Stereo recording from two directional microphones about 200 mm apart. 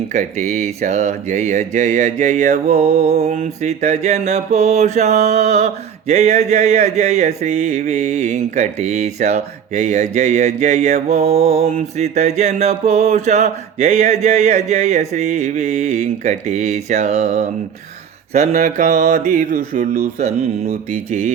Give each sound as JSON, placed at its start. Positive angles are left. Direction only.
{"t": 0.1, "sound": "mantra", "side_deg": -35}